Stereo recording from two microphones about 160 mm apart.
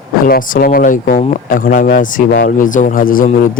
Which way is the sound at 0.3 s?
60° left (ahead or behind).